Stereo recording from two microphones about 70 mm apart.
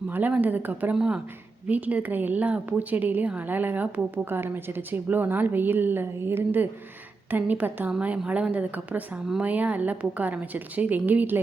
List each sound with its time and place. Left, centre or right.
0.1 s a woman's voice: right
0.9 s speech: centre
1.6 s a woman's voice: right